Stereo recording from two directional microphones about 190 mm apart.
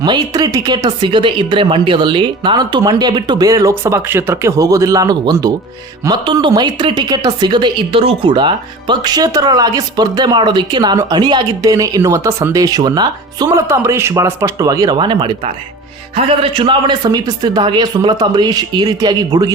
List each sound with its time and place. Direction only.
0.0 s a woman's voice: 20° right (ahead or behind)